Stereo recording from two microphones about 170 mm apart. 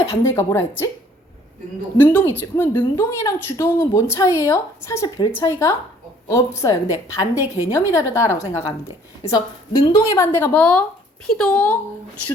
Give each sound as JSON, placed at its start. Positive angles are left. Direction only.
{"t": 0.2, "sound": "a woman's voice", "side_deg": 15}
{"t": 2.0, "sound": "a woman's voice", "side_deg": 10}